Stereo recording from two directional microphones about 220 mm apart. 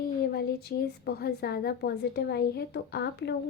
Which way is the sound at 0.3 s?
45° left (ahead or behind).